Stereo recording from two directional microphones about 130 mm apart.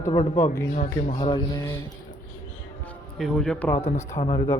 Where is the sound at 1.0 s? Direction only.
40° left (ahead or behind).